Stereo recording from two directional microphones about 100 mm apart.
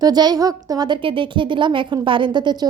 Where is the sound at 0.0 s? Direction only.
40° right (ahead or behind).